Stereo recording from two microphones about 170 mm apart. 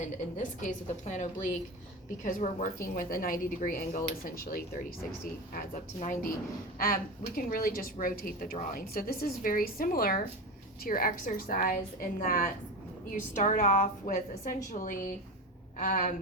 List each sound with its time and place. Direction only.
0.3 s a woman's voice: 45° left (ahead or behind)